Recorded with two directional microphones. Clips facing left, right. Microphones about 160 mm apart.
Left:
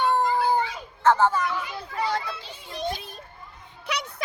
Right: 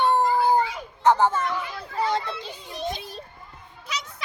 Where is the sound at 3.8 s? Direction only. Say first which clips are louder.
Left 4 dB; 65° left (ahead or behind).